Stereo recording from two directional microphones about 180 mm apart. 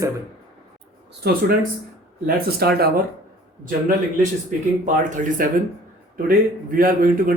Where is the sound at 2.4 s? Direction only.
60° right (ahead or behind).